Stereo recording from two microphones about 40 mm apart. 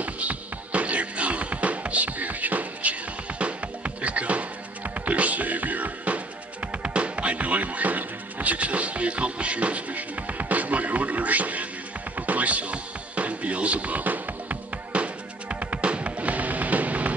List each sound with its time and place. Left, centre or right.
0.0 s music: right
14.9 s music: right